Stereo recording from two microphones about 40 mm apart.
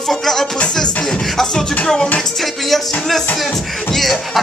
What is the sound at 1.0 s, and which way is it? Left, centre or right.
Beatboxing, centre.